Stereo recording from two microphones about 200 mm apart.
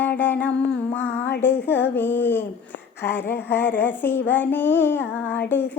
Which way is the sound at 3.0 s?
10° left (ahead or behind).